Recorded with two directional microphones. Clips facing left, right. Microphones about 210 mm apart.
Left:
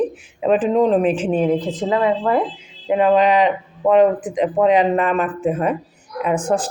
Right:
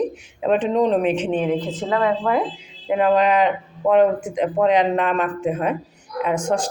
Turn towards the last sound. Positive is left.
turn(degrees=5)  # may be behind; listen again after turning